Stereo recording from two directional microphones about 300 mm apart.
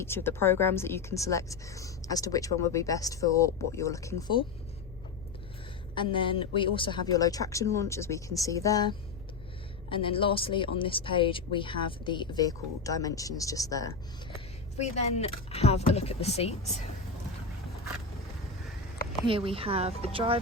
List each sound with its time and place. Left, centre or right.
0.0 s speech: centre
5.9 s speech: centre
14.8 s speech: left
19.2 s speech: centre